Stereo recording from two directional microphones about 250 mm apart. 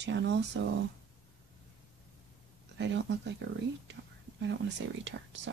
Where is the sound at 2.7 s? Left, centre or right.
Right.